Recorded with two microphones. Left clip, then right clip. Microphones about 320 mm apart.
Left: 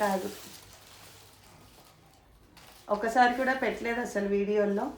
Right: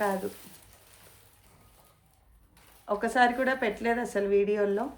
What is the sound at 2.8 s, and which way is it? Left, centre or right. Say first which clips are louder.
Speech: even; right.